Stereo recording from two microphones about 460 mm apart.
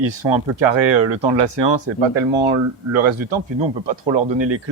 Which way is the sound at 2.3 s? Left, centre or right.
Right.